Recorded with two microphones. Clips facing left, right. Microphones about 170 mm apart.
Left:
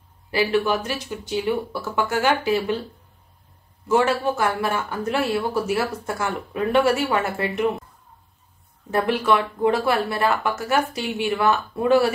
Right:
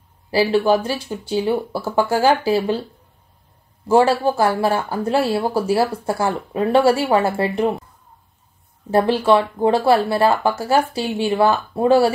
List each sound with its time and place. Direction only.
0.3 s speech: 30° right (ahead or behind)
3.8 s speech: 30° right (ahead or behind)
8.9 s speech: 30° right (ahead or behind)